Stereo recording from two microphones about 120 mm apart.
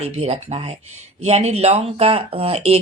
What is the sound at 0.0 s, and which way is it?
Speech, 60° right (ahead or behind).